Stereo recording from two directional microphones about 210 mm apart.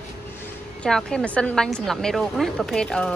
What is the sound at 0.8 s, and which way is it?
A woman's voice, 5° left (ahead or behind).